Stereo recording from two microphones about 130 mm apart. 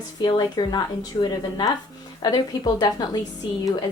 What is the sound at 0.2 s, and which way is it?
A woman's voice, 35° left (ahead or behind).